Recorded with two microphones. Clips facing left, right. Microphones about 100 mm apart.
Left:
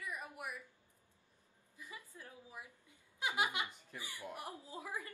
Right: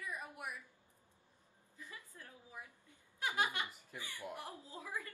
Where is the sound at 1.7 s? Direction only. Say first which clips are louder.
Left 1 dB; 15° left (ahead or behind).